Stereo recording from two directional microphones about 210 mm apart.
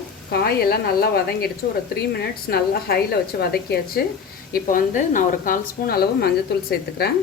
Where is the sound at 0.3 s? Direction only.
50° left (ahead or behind).